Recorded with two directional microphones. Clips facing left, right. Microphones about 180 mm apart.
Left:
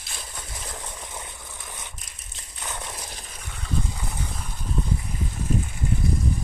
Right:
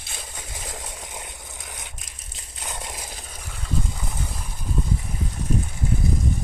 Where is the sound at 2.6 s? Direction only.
15° right (ahead or behind).